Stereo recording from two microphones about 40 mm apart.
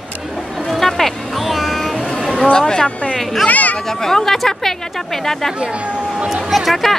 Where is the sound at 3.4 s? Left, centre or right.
Left.